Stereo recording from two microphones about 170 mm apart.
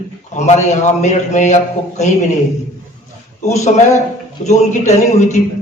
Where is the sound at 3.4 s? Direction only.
40° left (ahead or behind).